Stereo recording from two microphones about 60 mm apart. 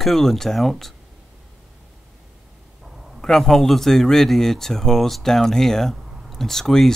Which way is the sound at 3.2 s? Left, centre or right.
Centre.